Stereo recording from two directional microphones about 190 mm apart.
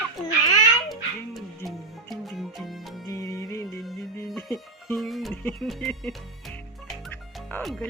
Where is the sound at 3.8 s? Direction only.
Centre (ahead or behind).